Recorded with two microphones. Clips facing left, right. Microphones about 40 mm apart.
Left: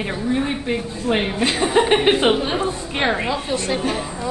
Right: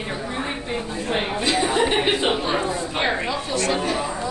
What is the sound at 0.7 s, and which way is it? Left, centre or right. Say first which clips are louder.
Speech: left 4 dB; centre.